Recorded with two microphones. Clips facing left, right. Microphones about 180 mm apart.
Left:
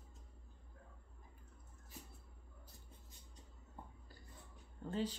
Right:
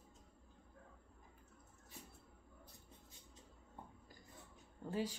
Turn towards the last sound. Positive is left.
turn(degrees=-10)  # may be behind; listen again after turning